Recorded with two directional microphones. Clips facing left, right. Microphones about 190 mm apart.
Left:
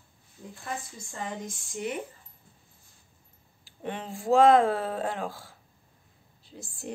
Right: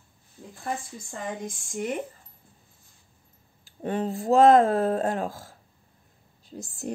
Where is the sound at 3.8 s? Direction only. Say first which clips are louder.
Right 7 dB; 40° right (ahead or behind).